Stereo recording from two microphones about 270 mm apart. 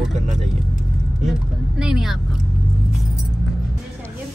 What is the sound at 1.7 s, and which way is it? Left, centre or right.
Speech, centre.